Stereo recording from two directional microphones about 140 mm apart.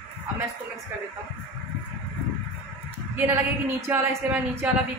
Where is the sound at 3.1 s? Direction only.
15° right (ahead or behind).